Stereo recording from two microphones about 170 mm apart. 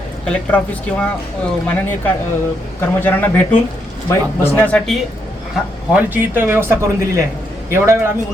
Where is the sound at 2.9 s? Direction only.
10° left (ahead or behind).